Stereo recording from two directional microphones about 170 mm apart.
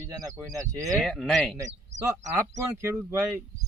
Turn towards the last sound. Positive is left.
turn(degrees=-15)  # may be behind; listen again after turning